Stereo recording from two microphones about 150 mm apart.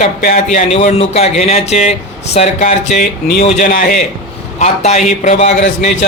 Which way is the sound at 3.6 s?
70° left (ahead or behind).